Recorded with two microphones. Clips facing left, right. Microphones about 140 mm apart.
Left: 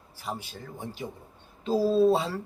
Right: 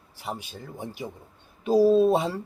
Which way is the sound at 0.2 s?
15° right (ahead or behind).